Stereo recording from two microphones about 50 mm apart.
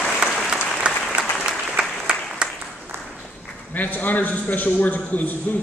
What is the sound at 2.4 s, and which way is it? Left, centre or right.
Applause, right.